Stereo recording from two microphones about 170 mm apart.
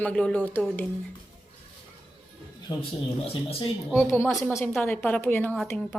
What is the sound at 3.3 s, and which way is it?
Speech, 35° left (ahead or behind).